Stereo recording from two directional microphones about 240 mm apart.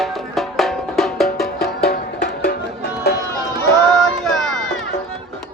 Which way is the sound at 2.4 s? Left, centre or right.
Left.